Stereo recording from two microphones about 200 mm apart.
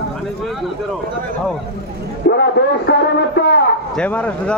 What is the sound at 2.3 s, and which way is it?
Speech, 60° left (ahead or behind).